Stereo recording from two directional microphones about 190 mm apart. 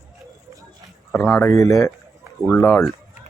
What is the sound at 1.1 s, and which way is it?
Speech, 10° left (ahead or behind).